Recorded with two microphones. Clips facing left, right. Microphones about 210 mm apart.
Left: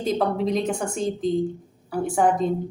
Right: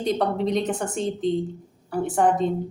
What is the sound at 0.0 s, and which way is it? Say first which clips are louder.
A woman's voice: even; centre (ahead or behind).